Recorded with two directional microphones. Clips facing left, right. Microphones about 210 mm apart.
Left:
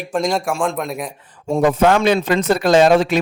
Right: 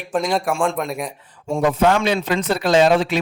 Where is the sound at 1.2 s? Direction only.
45° left (ahead or behind).